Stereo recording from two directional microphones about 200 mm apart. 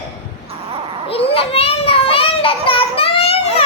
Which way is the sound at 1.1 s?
30° left (ahead or behind).